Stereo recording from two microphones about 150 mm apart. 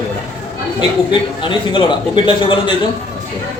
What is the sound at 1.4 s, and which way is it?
A man's voice, 30° left (ahead or behind).